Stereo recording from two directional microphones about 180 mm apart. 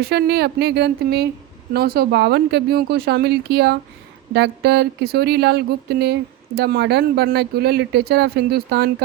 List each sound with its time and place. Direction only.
0.0 s speech: 65° right (ahead or behind)